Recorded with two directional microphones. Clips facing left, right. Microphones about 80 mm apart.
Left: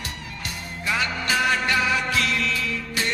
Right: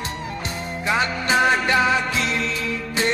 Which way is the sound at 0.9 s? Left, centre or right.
Right.